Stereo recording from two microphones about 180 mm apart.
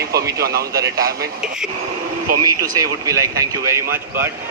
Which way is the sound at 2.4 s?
20° right (ahead or behind).